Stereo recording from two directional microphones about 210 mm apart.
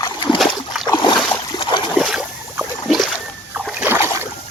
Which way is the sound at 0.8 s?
20° left (ahead or behind).